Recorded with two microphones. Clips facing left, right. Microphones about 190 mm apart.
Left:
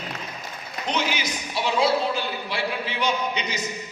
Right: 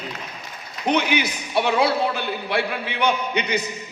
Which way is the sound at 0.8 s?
60° right (ahead or behind).